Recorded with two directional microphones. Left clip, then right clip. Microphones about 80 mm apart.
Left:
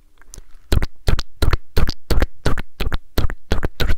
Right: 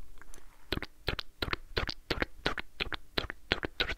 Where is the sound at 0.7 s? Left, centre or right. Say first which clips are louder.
Left 10 dB; left.